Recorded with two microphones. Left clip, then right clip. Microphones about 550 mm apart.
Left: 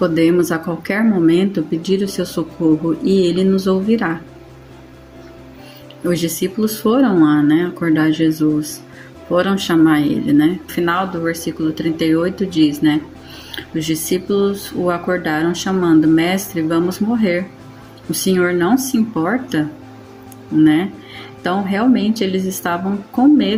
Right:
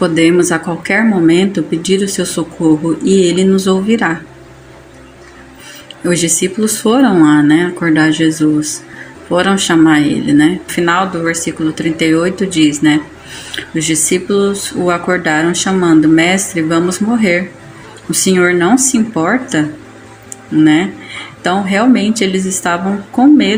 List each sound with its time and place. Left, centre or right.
0.0 s speech: left
6.1 s speech: left
21.4 s speech: left